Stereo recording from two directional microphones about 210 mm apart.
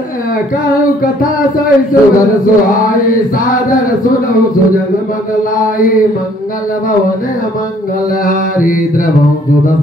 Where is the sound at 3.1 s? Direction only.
40° left (ahead or behind).